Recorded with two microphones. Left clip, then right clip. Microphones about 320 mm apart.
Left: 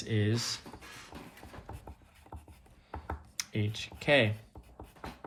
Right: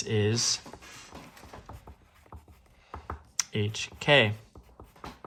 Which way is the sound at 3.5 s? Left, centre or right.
Centre.